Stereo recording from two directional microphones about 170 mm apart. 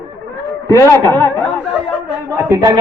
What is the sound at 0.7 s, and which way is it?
Speech, 15° left (ahead or behind).